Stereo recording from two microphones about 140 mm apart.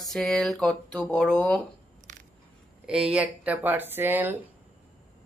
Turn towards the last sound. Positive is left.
turn(degrees=-15)  # may be behind; listen again after turning